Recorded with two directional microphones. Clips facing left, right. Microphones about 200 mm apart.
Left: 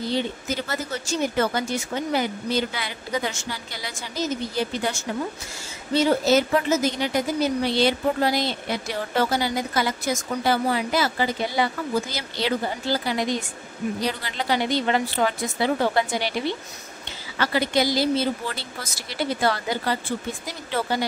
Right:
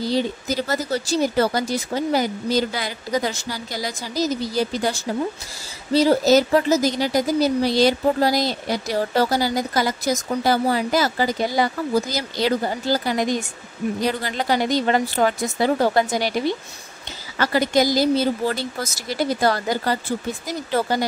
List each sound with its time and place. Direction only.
0.0 s a woman's voice: 40° right (ahead or behind)